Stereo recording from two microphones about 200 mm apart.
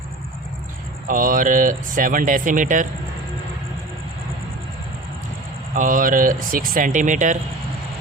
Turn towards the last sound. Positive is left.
turn(degrees=-40)  # may be behind; listen again after turning